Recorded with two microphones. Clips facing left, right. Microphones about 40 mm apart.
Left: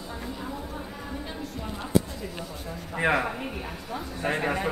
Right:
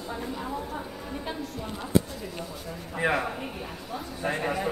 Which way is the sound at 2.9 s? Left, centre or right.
Left.